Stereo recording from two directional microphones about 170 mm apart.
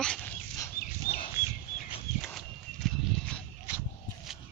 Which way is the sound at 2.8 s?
Centre (ahead or behind).